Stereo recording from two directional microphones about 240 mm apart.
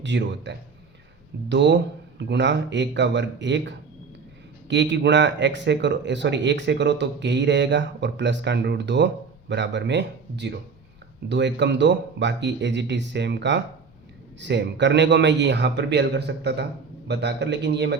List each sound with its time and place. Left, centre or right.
0.0 s speech: right